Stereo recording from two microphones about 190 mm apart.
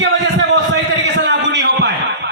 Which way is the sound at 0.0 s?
70° right (ahead or behind).